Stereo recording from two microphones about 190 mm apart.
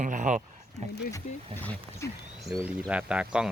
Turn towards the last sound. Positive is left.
turn(degrees=-5)  # may be behind; listen again after turning